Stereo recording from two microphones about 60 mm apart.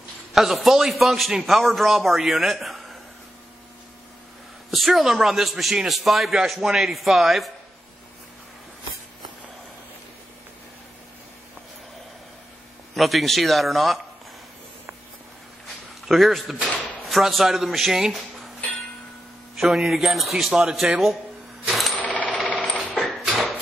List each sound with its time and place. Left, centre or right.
0.3 s a man's voice: centre
4.6 s a man's voice: centre
12.9 s a man's voice: centre
16.1 s a man's voice: centre
19.5 s a man's voice: centre
21.6 s coin: centre
21.9 s coin: left
22.5 s a sound: left